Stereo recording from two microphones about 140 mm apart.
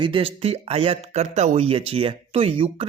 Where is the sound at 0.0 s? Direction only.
40° right (ahead or behind).